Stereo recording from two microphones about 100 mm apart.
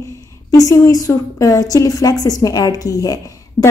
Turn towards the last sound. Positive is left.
turn(degrees=35)  # may be behind; listen again after turning